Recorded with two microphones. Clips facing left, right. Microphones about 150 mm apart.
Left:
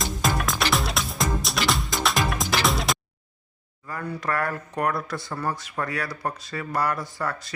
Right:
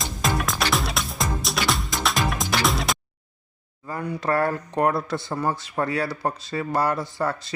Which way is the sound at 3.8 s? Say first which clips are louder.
Right 4 dB; 20° right (ahead or behind).